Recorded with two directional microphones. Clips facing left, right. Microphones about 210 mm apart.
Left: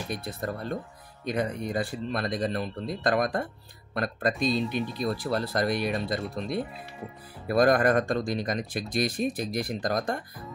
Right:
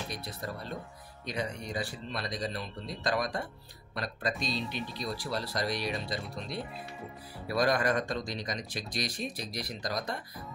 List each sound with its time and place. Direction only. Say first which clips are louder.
0.1 s speech: left 6 dB; 50° left (ahead or behind)